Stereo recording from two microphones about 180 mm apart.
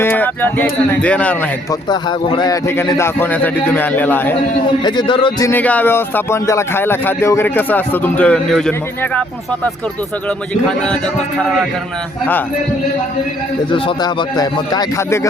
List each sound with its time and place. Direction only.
0.0 s speech: 10° left (ahead or behind)
1.9 s speech: 25° left (ahead or behind)
4.8 s speech: 25° left (ahead or behind)
5.5 s speech: 10° left (ahead or behind)
10.2 s speech: 5° left (ahead or behind)
13.7 s speech: 30° left (ahead or behind)